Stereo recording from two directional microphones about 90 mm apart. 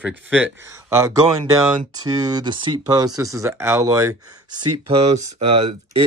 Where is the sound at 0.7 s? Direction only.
35° right (ahead or behind).